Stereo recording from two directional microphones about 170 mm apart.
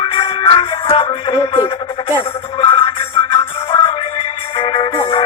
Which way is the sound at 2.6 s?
35° left (ahead or behind).